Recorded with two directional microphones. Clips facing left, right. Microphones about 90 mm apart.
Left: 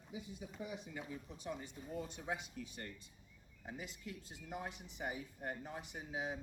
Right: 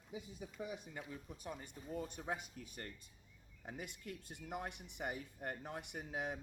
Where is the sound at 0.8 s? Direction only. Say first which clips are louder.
Left 2 dB; 45° right (ahead or behind).